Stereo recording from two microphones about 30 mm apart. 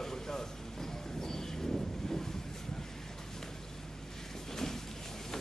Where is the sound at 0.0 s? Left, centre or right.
Centre.